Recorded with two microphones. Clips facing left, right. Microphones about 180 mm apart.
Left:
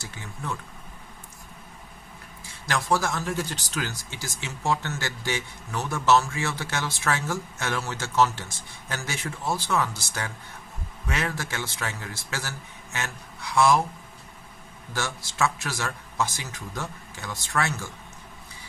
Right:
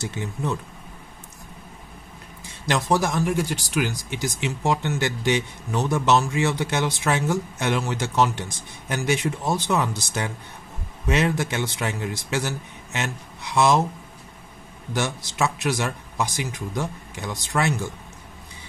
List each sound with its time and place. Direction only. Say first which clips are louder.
0.0 s a man's voice: right 9 dB; 20° right (ahead or behind)
2.6 s a man's voice: right 4 dB; 20° right (ahead or behind)
14.9 s speech: right 5 dB; 20° right (ahead or behind)